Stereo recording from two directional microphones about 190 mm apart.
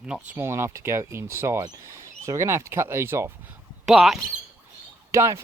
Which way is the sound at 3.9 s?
Centre (ahead or behind).